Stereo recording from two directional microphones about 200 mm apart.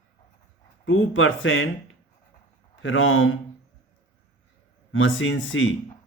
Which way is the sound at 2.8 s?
85° left.